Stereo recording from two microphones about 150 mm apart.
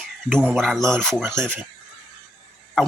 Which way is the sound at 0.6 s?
Centre (ahead or behind).